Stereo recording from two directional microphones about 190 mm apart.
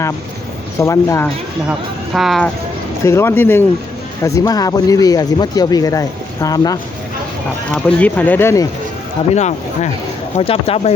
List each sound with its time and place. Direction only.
0.8 s speech: 15° left (ahead or behind)
2.1 s speech: centre (ahead or behind)
3.0 s speech: 15° left (ahead or behind)
7.7 s speech: 5° left (ahead or behind)
9.3 s speech: 35° left (ahead or behind)